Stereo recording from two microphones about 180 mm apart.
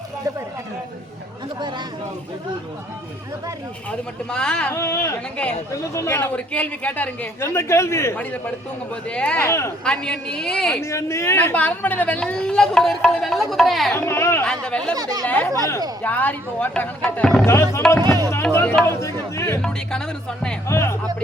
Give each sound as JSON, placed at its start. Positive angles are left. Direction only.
{"t": 4.3, "sound": "a woman's voice", "side_deg": 5}
{"t": 4.7, "sound": "a man's voice", "side_deg": 15}
{"t": 9.8, "sound": "a woman's voice", "side_deg": 5}
{"t": 10.8, "sound": "a man's voice", "side_deg": 15}
{"t": 13.9, "sound": "a man's voice", "side_deg": 15}
{"t": 14.9, "sound": "speech", "side_deg": -20}
{"t": 15.3, "sound": "a man's voice", "side_deg": 10}
{"t": 20.7, "sound": "a man's voice", "side_deg": 15}